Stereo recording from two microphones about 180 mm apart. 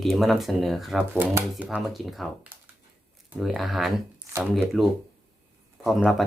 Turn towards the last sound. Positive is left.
turn(degrees=0)  # may be behind; listen again after turning